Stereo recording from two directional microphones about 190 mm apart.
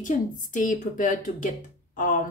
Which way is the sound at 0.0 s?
45° left (ahead or behind).